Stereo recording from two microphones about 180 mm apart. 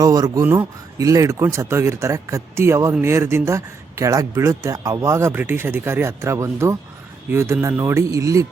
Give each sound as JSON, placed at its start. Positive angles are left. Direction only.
{"t": 0.0, "sound": "speech", "side_deg": -20}